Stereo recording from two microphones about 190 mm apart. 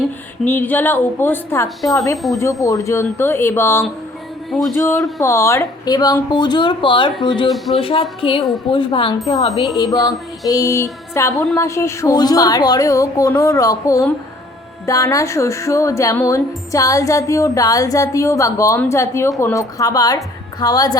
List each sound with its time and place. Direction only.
0.4 s speech: 10° left (ahead or behind)
7.5 s speech: centre (ahead or behind)
7.8 s speech: 30° left (ahead or behind)